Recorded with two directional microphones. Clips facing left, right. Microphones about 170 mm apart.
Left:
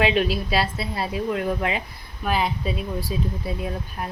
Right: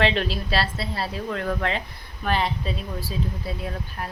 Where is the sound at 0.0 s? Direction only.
10° left (ahead or behind).